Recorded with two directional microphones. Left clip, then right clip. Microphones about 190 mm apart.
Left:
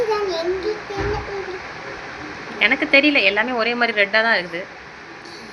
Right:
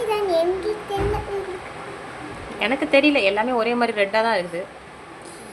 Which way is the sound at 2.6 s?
15° right (ahead or behind).